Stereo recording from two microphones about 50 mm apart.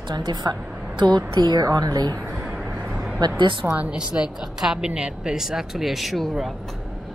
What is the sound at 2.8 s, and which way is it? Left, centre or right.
Vehicle, right.